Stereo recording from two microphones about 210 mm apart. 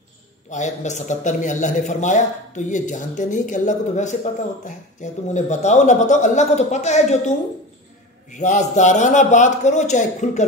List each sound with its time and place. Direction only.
0.5 s a man's voice: 35° left (ahead or behind)